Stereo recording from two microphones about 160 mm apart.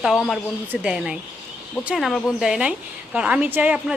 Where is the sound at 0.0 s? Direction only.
Centre (ahead or behind).